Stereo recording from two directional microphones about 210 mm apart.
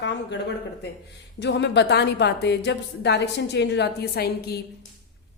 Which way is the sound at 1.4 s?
55° left (ahead or behind).